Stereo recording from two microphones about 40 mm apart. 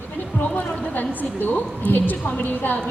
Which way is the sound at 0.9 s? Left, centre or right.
Left.